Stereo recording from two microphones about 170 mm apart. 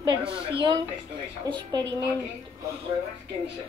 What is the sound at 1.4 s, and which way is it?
Speech, 25° right (ahead or behind).